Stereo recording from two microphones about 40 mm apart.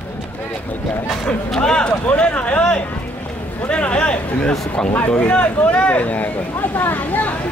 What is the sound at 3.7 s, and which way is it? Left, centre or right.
Speech, left.